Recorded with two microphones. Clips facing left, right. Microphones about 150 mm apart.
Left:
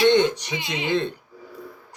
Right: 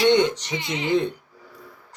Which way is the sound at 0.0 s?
20° right (ahead or behind).